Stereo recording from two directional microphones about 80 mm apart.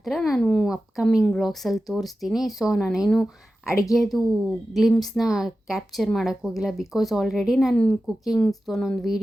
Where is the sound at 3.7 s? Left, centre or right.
Left.